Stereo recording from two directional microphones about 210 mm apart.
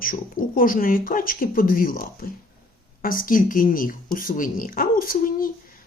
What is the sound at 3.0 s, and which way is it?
Speech, 40° left (ahead or behind).